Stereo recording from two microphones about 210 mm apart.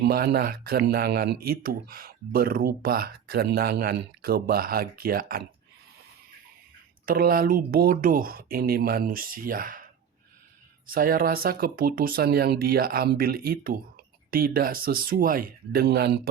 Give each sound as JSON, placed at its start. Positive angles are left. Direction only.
{"t": 0.0, "sound": "speech", "side_deg": -50}
{"t": 7.0, "sound": "speech", "side_deg": -45}
{"t": 10.8, "sound": "speech", "side_deg": -45}